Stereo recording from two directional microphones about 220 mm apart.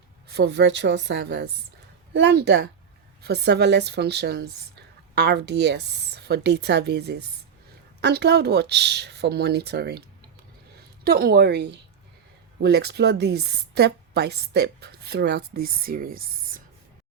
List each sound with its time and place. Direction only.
0.3 s speech: 50° right (ahead or behind)
11.0 s speech: 45° right (ahead or behind)